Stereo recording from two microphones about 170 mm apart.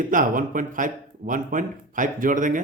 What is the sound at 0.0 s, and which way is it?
A man's voice, 50° right (ahead or behind).